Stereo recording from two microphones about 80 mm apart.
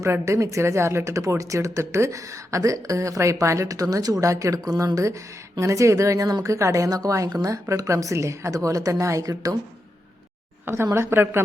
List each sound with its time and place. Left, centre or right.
0.0 s a woman's voice: right
10.9 s a woman's voice: right